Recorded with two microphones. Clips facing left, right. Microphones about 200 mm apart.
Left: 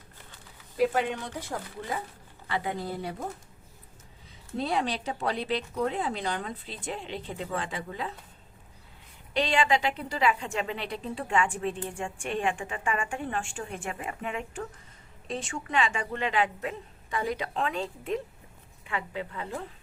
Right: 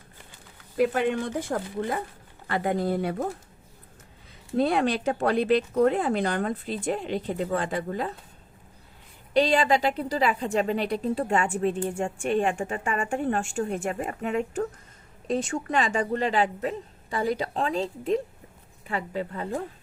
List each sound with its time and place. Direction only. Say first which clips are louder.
0.8 s speech: right 3 dB; 55° right (ahead or behind)
4.5 s speech: right 6 dB; 55° right (ahead or behind)
9.3 s a woman's voice: right 4 dB; 40° right (ahead or behind)